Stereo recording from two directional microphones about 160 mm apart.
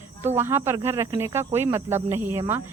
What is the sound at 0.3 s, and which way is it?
Speech, 15° right (ahead or behind).